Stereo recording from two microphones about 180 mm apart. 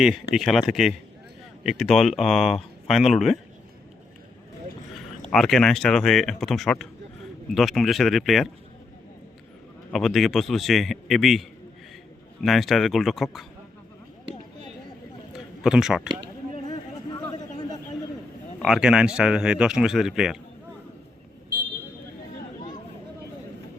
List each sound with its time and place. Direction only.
0.3 s speech: centre (ahead or behind)
5.2 s speech: centre (ahead or behind)
9.9 s speech: centre (ahead or behind)
15.6 s speech: 5° right (ahead or behind)
16.6 s chatter: 20° left (ahead or behind)
18.6 s speech: 5° right (ahead or behind)